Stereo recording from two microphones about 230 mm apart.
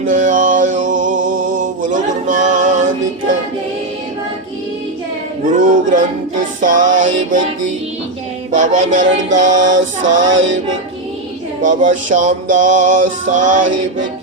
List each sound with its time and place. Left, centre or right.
0.0 s a sound: right
5.5 s music: right
8.5 s music: right
10.3 s music: right
11.6 s music: right